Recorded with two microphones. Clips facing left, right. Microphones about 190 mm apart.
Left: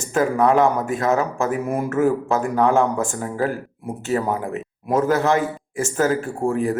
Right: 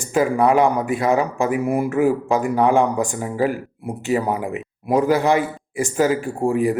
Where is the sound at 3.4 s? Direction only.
Centre (ahead or behind).